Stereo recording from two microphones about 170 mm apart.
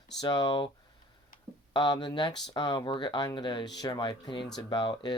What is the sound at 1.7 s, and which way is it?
Speech, 25° left (ahead or behind).